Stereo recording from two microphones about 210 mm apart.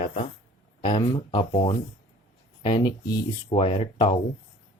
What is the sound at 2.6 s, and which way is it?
Speech, 20° left (ahead or behind).